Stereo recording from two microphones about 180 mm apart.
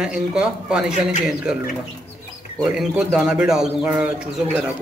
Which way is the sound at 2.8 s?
Centre (ahead or behind).